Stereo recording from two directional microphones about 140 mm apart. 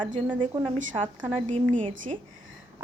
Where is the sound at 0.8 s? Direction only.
65° right (ahead or behind).